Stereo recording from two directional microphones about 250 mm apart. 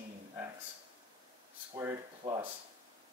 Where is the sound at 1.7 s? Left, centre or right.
Centre.